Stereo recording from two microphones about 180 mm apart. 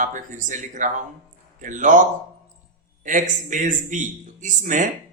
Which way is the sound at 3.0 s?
45° right (ahead or behind).